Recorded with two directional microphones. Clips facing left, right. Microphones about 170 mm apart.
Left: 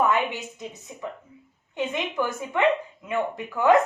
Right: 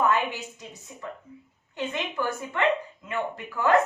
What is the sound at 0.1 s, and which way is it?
A woman's voice, 20° left (ahead or behind).